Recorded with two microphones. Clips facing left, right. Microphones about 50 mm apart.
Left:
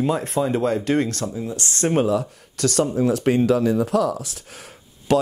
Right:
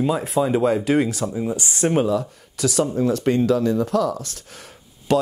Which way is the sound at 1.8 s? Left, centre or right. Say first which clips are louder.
Even; centre.